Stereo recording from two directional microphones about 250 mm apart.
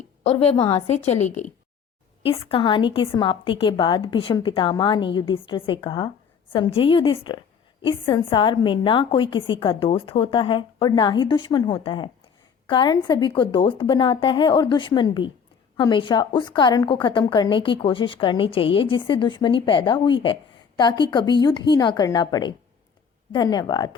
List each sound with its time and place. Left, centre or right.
0.2 s a woman's voice: left